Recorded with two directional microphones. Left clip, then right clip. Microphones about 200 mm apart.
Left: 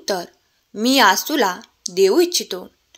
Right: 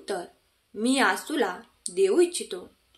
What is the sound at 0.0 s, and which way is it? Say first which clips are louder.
A woman's voice: left 9 dB; 40° left (ahead or behind).